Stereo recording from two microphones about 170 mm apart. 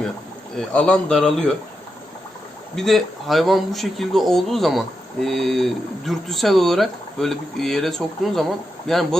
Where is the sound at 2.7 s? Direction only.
Centre (ahead or behind).